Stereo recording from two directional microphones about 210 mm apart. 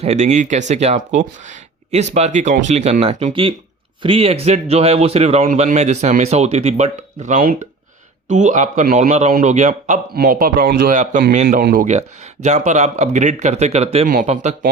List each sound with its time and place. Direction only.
0.0 s a man's voice: 30° right (ahead or behind)